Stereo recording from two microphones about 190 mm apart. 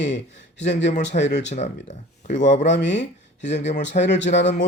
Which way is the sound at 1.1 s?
45° left (ahead or behind).